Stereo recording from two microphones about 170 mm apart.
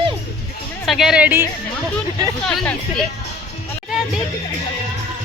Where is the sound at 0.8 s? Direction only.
Centre (ahead or behind).